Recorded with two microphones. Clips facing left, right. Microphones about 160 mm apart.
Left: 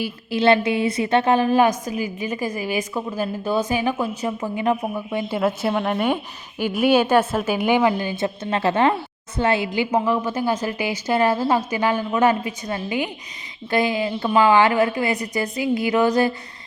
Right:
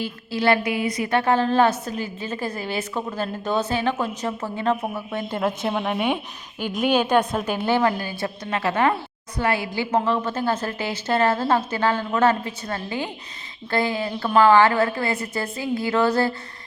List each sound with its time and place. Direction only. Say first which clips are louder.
0.0 s a woman's voice: left 3 dB; 20° left (ahead or behind)